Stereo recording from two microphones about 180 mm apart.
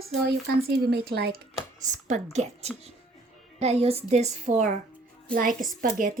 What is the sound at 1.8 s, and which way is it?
A woman's voice, 40° right (ahead or behind).